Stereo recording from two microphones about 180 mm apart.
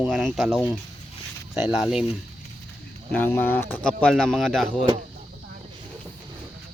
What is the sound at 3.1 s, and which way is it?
Speech, 10° left (ahead or behind).